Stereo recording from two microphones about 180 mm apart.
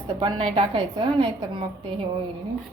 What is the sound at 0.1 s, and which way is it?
A woman's voice, 30° right (ahead or behind).